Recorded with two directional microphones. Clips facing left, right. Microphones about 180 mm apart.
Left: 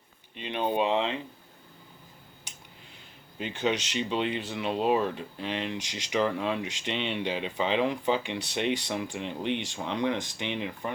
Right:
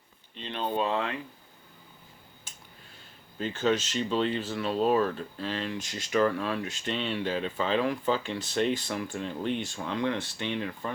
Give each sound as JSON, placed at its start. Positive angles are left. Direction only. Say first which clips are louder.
{"t": 0.3, "sound": "speech", "louder": "left 3 dB", "side_deg": 10}
{"t": 3.3, "sound": "speech", "louder": "right 2 dB", "side_deg": 15}